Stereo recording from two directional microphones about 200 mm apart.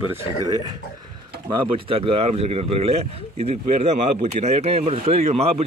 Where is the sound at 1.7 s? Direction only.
25° right (ahead or behind).